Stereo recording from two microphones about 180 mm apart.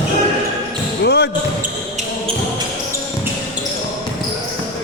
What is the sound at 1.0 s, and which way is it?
Basketball bounce, 65° left (ahead or behind).